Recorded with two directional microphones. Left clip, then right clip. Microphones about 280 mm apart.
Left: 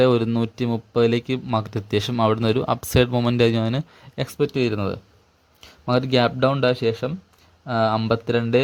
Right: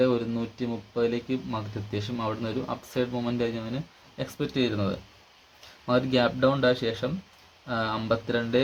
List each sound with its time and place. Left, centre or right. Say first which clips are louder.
0.0 s speech: left 7 dB; left